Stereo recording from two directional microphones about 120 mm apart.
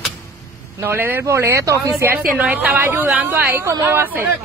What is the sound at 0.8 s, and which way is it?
Speech, 15° right (ahead or behind).